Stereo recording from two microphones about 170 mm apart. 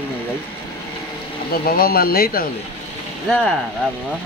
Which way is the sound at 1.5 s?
60° left (ahead or behind).